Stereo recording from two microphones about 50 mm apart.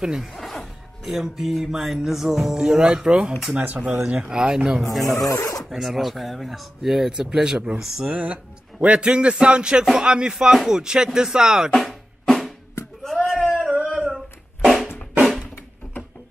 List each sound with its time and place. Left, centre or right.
0.2 s speech: centre
5.3 s speech: left
5.7 s speech: centre
7.1 s music: centre
7.8 s speech: centre
9.9 s music: centre
11.7 s drum: centre
13.0 s a sound: centre
13.4 s a sound: right